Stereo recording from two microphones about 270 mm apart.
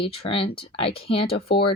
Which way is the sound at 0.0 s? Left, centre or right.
Centre.